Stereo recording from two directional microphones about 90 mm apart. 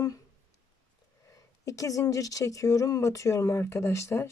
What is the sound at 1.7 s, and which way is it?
Speech, 40° left (ahead or behind).